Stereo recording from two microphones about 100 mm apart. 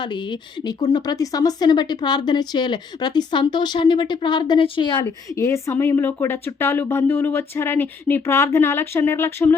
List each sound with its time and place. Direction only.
0.0 s speech: 50° left (ahead or behind)
0.8 s speech: 40° left (ahead or behind)
5.4 s speech: 30° left (ahead or behind)